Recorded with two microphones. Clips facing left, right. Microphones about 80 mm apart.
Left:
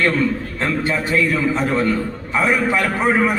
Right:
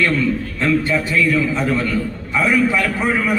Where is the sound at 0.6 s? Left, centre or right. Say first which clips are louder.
Right 3 dB; left.